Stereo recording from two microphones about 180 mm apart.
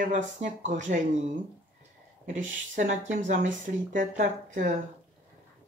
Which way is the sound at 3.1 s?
45° right (ahead or behind).